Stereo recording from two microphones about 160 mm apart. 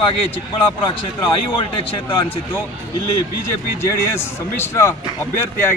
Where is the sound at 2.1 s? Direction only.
30° left (ahead or behind).